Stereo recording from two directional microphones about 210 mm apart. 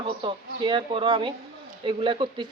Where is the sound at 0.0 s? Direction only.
25° right (ahead or behind).